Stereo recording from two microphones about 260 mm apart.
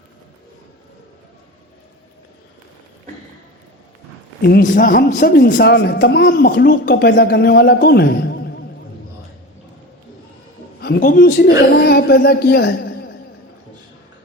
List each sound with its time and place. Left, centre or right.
4.4 s speech: left
10.8 s a woman's voice: left